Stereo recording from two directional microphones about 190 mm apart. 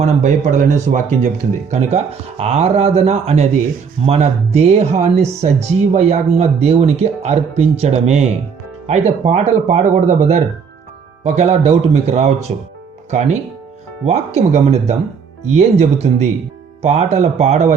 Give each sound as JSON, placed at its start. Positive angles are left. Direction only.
{"t": 0.0, "sound": "speech", "side_deg": -40}